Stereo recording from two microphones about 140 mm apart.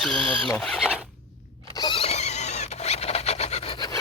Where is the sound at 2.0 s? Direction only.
50° left (ahead or behind).